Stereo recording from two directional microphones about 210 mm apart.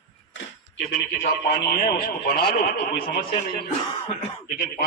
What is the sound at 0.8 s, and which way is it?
A man's voice, 40° left (ahead or behind).